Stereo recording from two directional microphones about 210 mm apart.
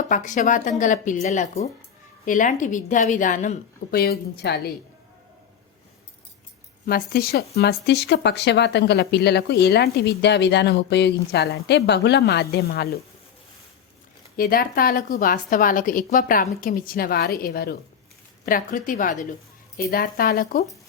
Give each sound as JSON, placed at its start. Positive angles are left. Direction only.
{"t": 0.0, "sound": "a woman's voice", "side_deg": 35}
{"t": 3.9, "sound": "speech", "side_deg": 50}
{"t": 6.8, "sound": "speech", "side_deg": 45}
{"t": 14.3, "sound": "a woman's voice", "side_deg": 45}